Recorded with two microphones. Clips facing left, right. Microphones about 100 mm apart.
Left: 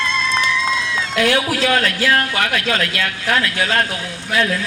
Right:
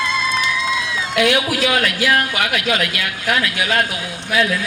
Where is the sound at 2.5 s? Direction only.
20° right (ahead or behind).